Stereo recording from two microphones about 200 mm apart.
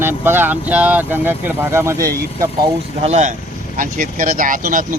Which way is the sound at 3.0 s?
35° right (ahead or behind).